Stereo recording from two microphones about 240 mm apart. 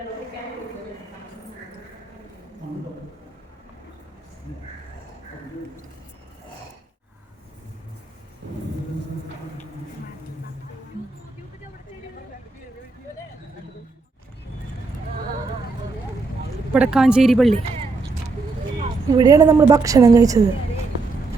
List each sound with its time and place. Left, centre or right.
16.7 s speech: centre
17.5 s speech: right
19.1 s a woman's voice: centre